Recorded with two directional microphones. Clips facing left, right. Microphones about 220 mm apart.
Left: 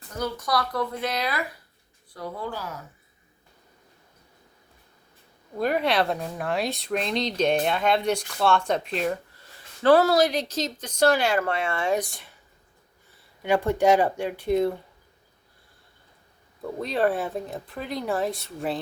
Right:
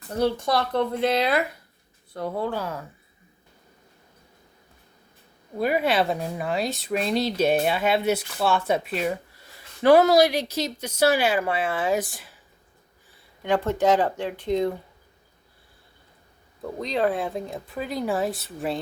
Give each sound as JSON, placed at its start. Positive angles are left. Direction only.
{"t": 0.1, "sound": "speech", "side_deg": -30}
{"t": 5.5, "sound": "speech", "side_deg": -5}
{"t": 13.4, "sound": "speech", "side_deg": 10}
{"t": 16.8, "sound": "speech", "side_deg": 5}